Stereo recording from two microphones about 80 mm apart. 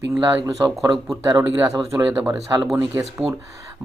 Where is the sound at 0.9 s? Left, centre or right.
Right.